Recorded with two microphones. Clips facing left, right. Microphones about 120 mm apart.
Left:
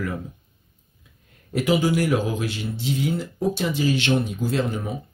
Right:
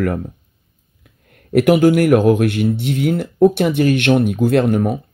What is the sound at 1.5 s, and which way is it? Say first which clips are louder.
Speech: right 9 dB; 60° right (ahead or behind).